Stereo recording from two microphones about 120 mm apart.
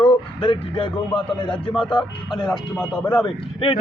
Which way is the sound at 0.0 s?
40° left (ahead or behind).